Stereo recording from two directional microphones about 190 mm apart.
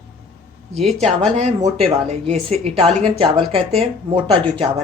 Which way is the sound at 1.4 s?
35° right (ahead or behind).